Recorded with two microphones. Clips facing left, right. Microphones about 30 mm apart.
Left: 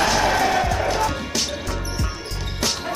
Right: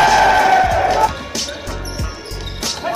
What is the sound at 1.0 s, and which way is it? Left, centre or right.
Music, centre.